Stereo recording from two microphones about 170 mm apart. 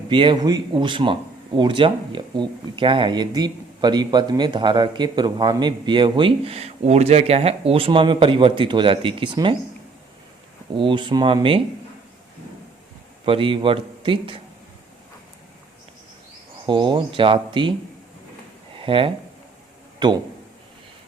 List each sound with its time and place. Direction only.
0.1 s speech: 30° right (ahead or behind)
10.8 s speech: 30° right (ahead or behind)
13.2 s a man's voice: 30° right (ahead or behind)
16.6 s speech: 30° right (ahead or behind)
18.8 s speech: 30° right (ahead or behind)